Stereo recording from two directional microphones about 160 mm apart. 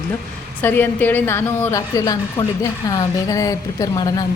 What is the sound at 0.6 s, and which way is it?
A woman's voice, 15° left (ahead or behind).